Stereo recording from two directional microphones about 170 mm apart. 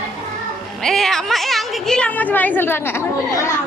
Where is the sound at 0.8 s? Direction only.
Centre (ahead or behind).